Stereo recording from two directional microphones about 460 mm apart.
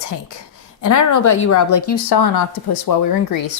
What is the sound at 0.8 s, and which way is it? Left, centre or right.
A woman's voice, left.